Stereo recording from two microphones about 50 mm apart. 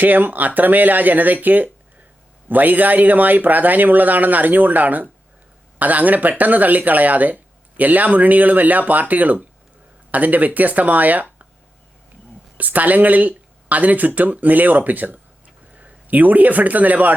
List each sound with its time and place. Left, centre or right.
0.0 s speech: right
12.5 s a man's voice: right